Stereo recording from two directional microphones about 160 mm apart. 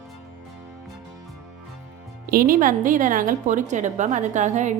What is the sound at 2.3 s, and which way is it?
A woman's voice, 60° right (ahead or behind).